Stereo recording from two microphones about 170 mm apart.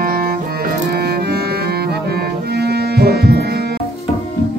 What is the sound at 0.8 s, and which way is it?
Cello, 65° right (ahead or behind).